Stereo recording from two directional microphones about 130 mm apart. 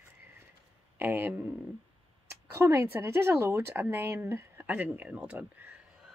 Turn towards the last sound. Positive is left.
turn(degrees=-15)  # may be behind; listen again after turning